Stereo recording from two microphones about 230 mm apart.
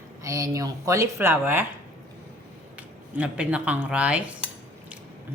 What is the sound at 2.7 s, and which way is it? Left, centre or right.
Speech, centre.